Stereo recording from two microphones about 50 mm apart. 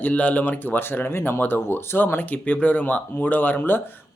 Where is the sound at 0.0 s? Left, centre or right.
Left.